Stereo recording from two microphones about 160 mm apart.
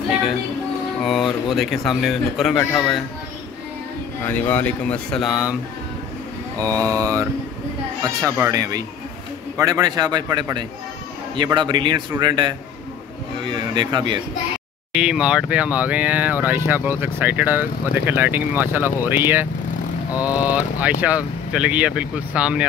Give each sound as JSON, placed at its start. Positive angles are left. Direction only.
{"t": 1.0, "sound": "speech", "side_deg": 0}
{"t": 4.3, "sound": "speech", "side_deg": 10}
{"t": 6.9, "sound": "speech", "side_deg": -20}
{"t": 14.9, "sound": "speech", "side_deg": -5}